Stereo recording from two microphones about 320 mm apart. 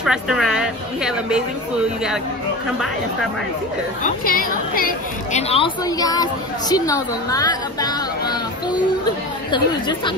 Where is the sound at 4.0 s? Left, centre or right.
Left.